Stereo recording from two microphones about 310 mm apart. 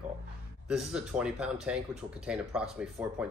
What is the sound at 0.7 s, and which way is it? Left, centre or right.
Speech, centre.